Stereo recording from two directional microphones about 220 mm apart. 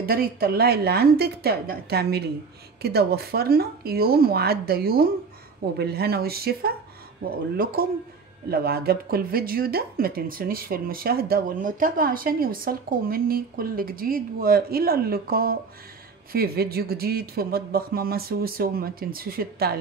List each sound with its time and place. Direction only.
0.0 s speech: 45° right (ahead or behind)